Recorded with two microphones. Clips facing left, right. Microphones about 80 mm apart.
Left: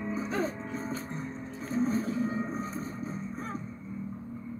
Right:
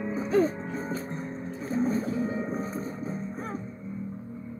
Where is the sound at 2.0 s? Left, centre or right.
Centre.